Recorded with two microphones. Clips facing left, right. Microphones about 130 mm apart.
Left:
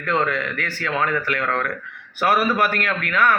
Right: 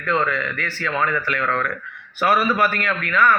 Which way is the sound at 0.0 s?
55° left (ahead or behind).